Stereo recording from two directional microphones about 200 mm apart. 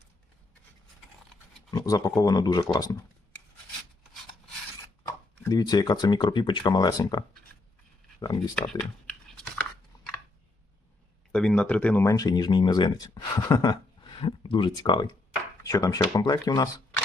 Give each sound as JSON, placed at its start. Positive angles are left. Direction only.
{"t": 1.7, "sound": "speech", "side_deg": 15}
{"t": 5.3, "sound": "speech", "side_deg": 15}
{"t": 8.5, "sound": "speech", "side_deg": 5}
{"t": 11.3, "sound": "speech", "side_deg": 5}